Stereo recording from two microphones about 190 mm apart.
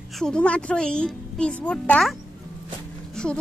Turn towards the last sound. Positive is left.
turn(degrees=5)  # may be behind; listen again after turning